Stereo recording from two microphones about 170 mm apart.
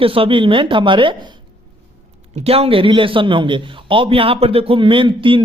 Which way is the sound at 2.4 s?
35° right (ahead or behind).